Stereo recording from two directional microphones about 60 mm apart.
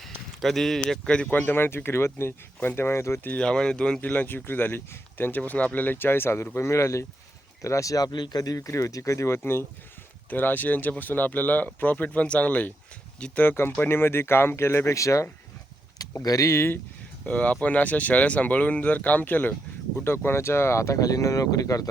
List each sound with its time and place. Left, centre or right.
0.0 s a sound: centre
1.0 s speech: centre
1.3 s speech: left
3.3 s speech: centre
4.0 s speech: left
5.4 s speech: left
6.7 s speech: left
10.2 s speech: left; by 13.4 s centre
13.4 s speech: left
16.2 s speech: left
16.5 s speech: left
17.2 s speech: left
20.2 s speech: left
21.0 s speech: left